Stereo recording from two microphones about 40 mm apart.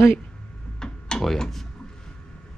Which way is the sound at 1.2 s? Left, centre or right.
Centre.